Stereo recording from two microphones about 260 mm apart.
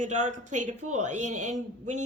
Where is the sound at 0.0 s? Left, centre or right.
Right.